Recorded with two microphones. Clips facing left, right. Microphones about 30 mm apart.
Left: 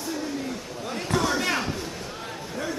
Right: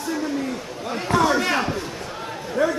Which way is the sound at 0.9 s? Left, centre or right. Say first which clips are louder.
Right 6 dB; centre.